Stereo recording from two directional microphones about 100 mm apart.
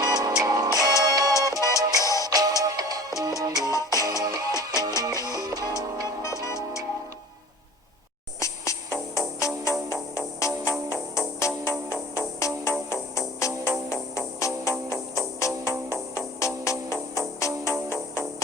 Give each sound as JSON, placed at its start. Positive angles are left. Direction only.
{"t": 0.0, "sound": "music", "side_deg": -40}
{"t": 1.6, "sound": "music", "side_deg": 30}
{"t": 2.2, "sound": "music", "side_deg": -40}
{"t": 3.7, "sound": "music", "side_deg": 30}
{"t": 4.0, "sound": "music", "side_deg": -40}
{"t": 6.4, "sound": "music", "side_deg": 30}
{"t": 8.4, "sound": "music", "side_deg": 30}
{"t": 12.9, "sound": "music", "side_deg": 30}